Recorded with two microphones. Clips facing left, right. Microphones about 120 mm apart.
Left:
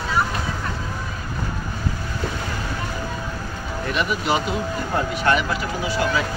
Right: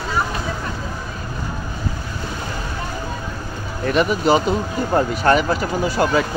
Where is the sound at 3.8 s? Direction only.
40° right (ahead or behind).